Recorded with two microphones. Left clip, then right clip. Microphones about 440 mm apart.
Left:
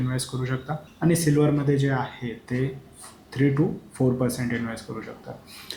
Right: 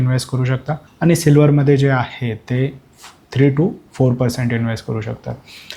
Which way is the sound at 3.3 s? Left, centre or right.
Right.